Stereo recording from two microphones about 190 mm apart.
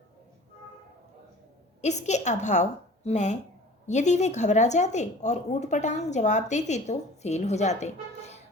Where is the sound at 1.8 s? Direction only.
35° left (ahead or behind).